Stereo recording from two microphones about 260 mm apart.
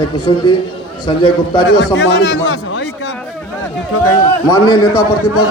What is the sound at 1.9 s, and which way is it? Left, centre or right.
A man's voice, left.